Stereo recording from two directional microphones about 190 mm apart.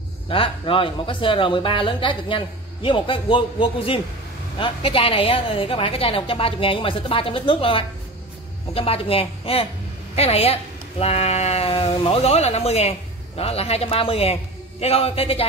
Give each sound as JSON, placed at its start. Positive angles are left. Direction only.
{"t": 0.3, "sound": "speech", "side_deg": 30}